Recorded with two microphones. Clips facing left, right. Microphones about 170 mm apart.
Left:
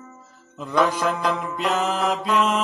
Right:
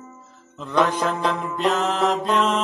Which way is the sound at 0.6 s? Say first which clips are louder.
Even; 5° left (ahead or behind).